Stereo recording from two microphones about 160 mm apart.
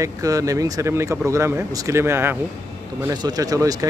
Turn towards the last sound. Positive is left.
turn(degrees=-20)  # may be behind; listen again after turning